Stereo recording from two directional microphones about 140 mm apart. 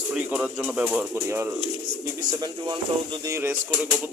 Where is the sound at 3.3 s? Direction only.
15° right (ahead or behind).